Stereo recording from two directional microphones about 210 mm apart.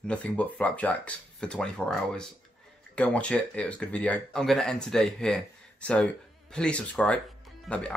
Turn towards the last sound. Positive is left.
turn(degrees=5)  # may be behind; listen again after turning